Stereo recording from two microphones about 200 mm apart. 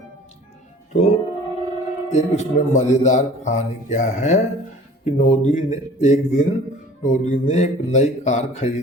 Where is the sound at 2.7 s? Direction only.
35° left (ahead or behind).